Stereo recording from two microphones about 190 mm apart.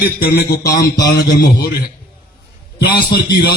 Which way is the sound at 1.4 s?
55° left (ahead or behind).